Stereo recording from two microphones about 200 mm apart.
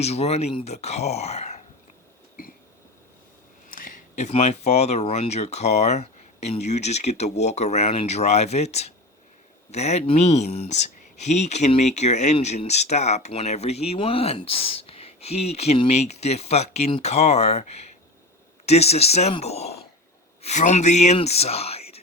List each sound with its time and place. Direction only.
0.0 s speech: 30° left (ahead or behind)
3.7 s speech: 40° left (ahead or behind)